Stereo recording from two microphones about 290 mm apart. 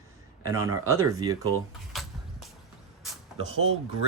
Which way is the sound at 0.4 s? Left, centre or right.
Centre.